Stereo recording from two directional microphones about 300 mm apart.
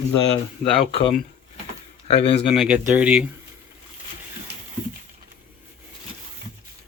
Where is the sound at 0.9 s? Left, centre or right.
Centre.